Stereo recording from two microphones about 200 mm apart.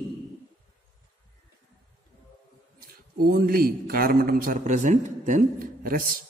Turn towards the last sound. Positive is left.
turn(degrees=-45)  # may be behind; listen again after turning